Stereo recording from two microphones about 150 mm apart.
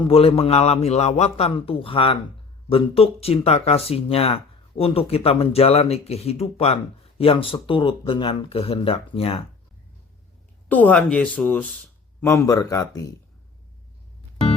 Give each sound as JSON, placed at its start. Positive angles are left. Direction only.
{"t": 0.0, "sound": "speech", "side_deg": 40}
{"t": 10.7, "sound": "speech", "side_deg": 10}